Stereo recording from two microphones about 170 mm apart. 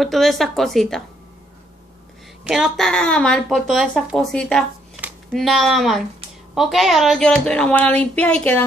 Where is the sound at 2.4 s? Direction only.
Centre (ahead or behind).